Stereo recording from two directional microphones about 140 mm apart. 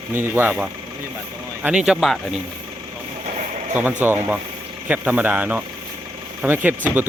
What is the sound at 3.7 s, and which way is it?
Speech, 10° right (ahead or behind).